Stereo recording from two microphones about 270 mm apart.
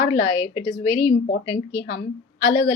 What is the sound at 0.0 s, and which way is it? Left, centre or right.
A woman's voice, centre.